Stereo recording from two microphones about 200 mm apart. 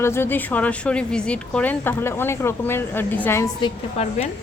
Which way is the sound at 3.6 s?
30° left (ahead or behind).